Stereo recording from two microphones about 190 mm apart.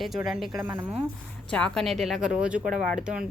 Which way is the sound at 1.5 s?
5° left (ahead or behind).